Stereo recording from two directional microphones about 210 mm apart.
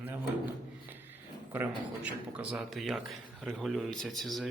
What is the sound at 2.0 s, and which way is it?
A man's voice, 5° right (ahead or behind).